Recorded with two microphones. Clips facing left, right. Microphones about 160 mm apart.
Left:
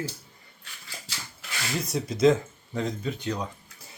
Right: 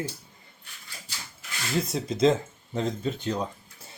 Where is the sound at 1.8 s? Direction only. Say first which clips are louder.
Left 2 dB; 25° right (ahead or behind).